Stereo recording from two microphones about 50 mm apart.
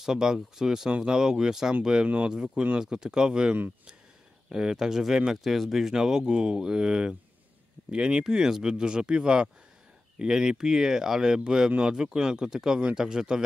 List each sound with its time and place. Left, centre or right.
0.0 s speech: centre